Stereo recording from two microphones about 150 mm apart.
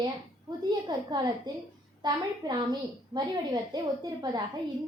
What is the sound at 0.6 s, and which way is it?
A woman's voice, 25° right (ahead or behind).